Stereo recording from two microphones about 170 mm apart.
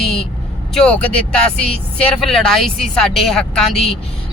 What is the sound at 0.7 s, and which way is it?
Speech, 5° left (ahead or behind).